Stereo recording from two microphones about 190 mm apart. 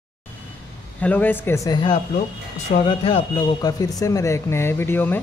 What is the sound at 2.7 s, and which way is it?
Speech, 30° left (ahead or behind).